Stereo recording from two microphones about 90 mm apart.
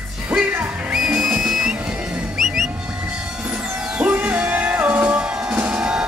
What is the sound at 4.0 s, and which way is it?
Music, 15° right (ahead or behind).